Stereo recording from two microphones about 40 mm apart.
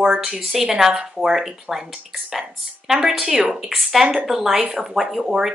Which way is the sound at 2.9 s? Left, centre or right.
Centre.